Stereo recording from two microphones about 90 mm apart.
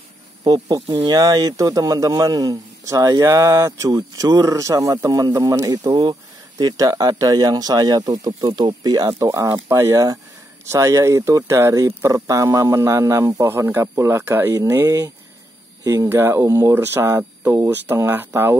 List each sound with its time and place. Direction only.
0.4 s speech: 45° right (ahead or behind)
0.8 s speech: 75° right (ahead or behind)
1.1 s a man's voice: 50° right (ahead or behind); by 14.5 s 25° right (ahead or behind)
14.5 s a man's voice: 35° right (ahead or behind)
15.8 s speech: 40° right (ahead or behind)
16.1 s speech: 30° right (ahead or behind)
17.2 s speech: 20° right (ahead or behind)